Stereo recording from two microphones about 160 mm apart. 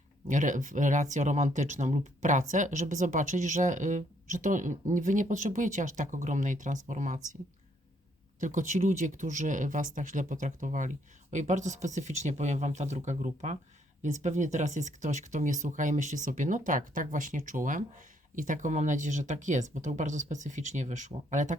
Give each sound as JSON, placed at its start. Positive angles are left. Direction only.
{"t": 0.3, "sound": "speech", "side_deg": -55}
{"t": 8.4, "sound": "speech", "side_deg": -50}